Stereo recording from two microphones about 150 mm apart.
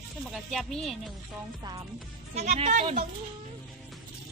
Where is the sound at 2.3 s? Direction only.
45° right (ahead or behind).